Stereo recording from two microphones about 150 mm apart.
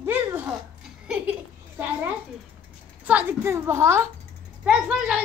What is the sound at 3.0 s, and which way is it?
A woman's voice, 10° right (ahead or behind).